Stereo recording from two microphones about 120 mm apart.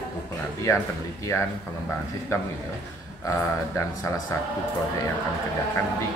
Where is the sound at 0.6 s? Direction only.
25° left (ahead or behind).